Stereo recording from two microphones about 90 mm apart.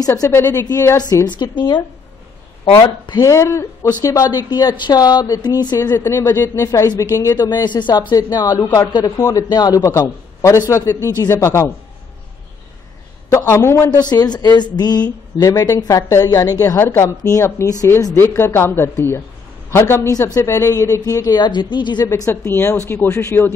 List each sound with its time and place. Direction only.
0.2 s speech: 25° left (ahead or behind)
0.7 s a man's voice: 40° left (ahead or behind)
1.4 s speech: 60° left (ahead or behind)
3.2 s a man's voice: 35° left (ahead or behind)
5.8 s a man's voice: 35° left (ahead or behind)
13.3 s a man's voice: 30° left (ahead or behind)
13.8 s a woman's voice: 50° left (ahead or behind)
18.1 s a man's voice: 25° left (ahead or behind); by 22.0 s 55° left (ahead or behind)
22.0 s speech: 35° left (ahead or behind)